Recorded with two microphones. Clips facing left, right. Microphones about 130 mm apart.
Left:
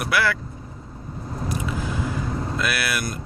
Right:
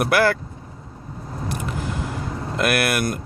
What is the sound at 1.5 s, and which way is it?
Vehicle, 60° right (ahead or behind).